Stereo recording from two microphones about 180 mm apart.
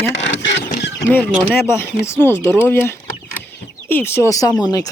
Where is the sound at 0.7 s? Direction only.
70° left (ahead or behind).